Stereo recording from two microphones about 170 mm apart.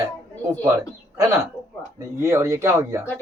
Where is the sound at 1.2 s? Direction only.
15° right (ahead or behind).